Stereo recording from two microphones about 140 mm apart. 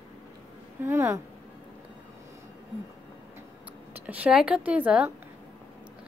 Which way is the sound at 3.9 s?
10° right (ahead or behind).